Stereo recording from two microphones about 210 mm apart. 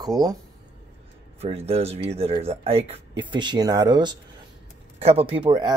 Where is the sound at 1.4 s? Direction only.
30° right (ahead or behind).